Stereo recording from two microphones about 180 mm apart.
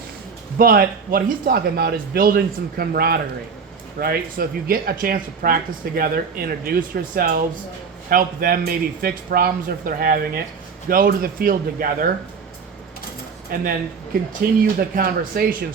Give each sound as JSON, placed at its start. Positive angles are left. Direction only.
{"t": 0.6, "sound": "a man's voice", "side_deg": -55}
{"t": 13.5, "sound": "a man's voice", "side_deg": -55}